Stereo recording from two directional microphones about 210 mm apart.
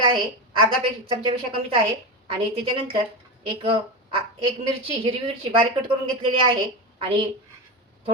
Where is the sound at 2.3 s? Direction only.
25° right (ahead or behind).